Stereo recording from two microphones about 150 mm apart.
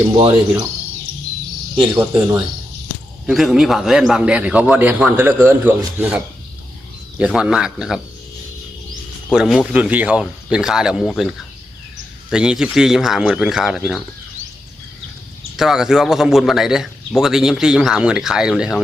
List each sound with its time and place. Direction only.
0.1 s cricket: 35° right (ahead or behind)
1.7 s speech: 15° right (ahead or behind)
3.2 s a man's voice: centre (ahead or behind)
7.2 s speech: 5° right (ahead or behind)
9.3 s speech: 5° right (ahead or behind)
12.3 s speech: 5° right (ahead or behind)
15.5 s speech: 5° right (ahead or behind)